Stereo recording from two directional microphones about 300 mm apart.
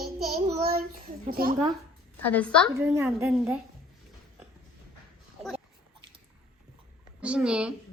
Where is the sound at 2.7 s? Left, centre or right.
Centre.